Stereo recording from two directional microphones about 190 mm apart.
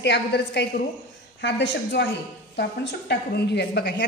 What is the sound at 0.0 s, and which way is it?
A woman's voice, 65° left (ahead or behind).